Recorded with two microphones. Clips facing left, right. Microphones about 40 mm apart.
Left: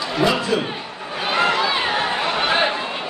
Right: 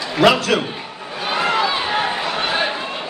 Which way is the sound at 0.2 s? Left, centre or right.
Right.